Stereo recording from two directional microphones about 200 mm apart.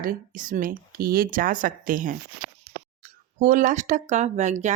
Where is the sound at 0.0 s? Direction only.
45° right (ahead or behind).